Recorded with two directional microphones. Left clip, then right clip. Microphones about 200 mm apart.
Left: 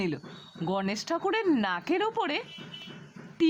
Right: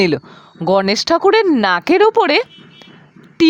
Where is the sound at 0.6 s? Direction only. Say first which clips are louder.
Right 17 dB; 50° right (ahead or behind).